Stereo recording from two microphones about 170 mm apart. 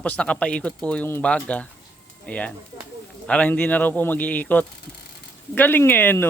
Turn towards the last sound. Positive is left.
turn(degrees=10)  # may be behind; listen again after turning